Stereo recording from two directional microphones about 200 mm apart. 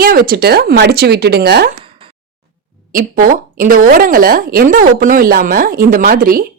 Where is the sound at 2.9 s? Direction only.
45° right (ahead or behind).